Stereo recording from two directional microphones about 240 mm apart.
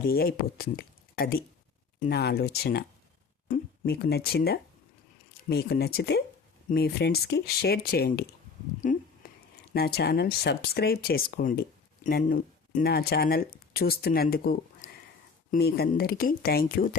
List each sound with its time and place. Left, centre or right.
0.1 s speech: left